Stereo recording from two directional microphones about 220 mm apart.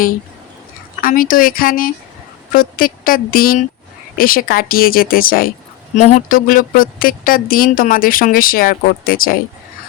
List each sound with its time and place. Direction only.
1.0 s speech: 40° left (ahead or behind)